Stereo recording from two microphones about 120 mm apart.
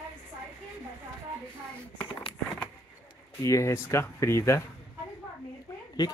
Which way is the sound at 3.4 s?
25° left (ahead or behind).